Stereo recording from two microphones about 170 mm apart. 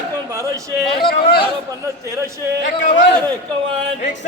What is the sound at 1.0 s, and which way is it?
Chatter, 65° left (ahead or behind).